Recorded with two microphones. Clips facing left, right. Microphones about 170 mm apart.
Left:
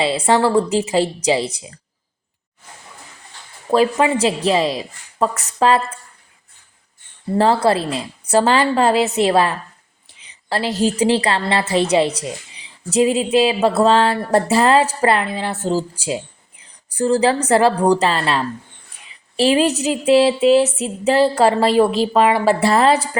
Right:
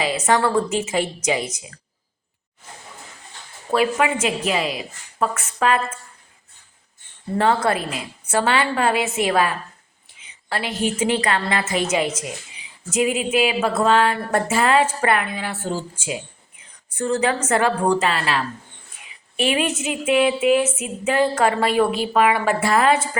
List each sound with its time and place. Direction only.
0.0 s a woman's voice: 30° left (ahead or behind)
3.7 s a woman's voice: 35° left (ahead or behind)
7.3 s a woman's voice: 30° left (ahead or behind)